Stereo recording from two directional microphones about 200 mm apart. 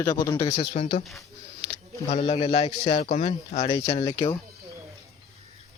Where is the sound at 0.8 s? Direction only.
35° left (ahead or behind).